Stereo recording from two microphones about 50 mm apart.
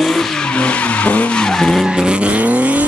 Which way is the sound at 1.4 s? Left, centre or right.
Centre.